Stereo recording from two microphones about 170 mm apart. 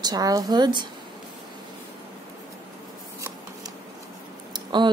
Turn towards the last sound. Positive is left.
turn(degrees=-25)  # may be behind; listen again after turning